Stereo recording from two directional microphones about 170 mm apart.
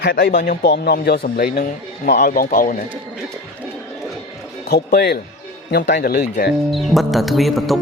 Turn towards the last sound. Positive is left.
turn(degrees=0)  # may be behind; listen again after turning